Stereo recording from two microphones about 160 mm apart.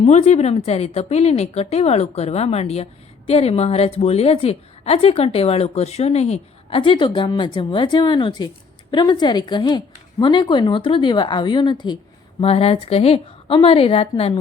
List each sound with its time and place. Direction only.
0.0 s a woman's voice: 45° left (ahead or behind)